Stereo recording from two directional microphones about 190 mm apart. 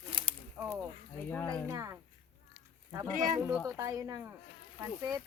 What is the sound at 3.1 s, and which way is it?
Speech, 40° right (ahead or behind).